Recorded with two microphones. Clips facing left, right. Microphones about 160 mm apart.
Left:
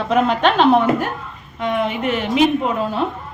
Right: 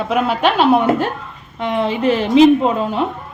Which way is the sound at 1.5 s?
30° right (ahead or behind).